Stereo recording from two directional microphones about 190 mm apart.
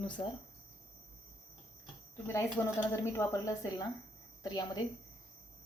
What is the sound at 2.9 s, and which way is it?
Speech, 15° left (ahead or behind).